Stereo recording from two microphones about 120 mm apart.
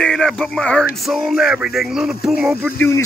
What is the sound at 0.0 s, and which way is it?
Speech, 5° left (ahead or behind).